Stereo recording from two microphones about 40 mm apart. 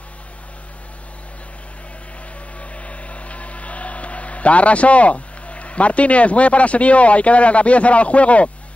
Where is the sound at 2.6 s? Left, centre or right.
Left.